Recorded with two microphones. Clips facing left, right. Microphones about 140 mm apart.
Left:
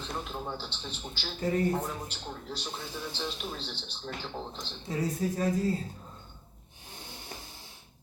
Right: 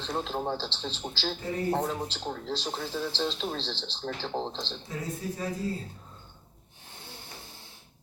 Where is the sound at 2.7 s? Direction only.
55° right (ahead or behind).